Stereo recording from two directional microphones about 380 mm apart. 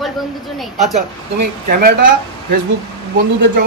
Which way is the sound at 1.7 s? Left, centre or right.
Right.